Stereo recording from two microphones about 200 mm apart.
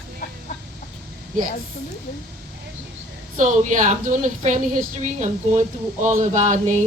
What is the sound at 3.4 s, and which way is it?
Speech, 40° right (ahead or behind).